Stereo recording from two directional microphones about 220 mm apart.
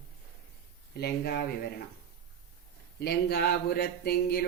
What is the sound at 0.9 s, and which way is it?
Speech, 45° left (ahead or behind).